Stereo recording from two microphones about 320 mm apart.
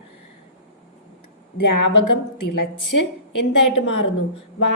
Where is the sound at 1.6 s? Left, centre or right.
Left.